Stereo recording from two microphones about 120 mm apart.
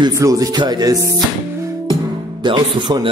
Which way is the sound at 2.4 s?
40° right (ahead or behind).